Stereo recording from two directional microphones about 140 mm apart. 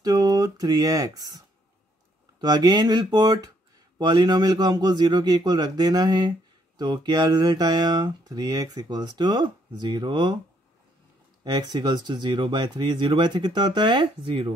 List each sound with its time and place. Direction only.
0.0 s a sound: 25° right (ahead or behind)
2.3 s speech: 30° right (ahead or behind)
11.4 s speech: 30° right (ahead or behind)